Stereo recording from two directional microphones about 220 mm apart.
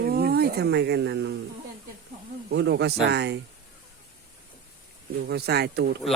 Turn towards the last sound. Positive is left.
turn(degrees=-50)  # may be behind; listen again after turning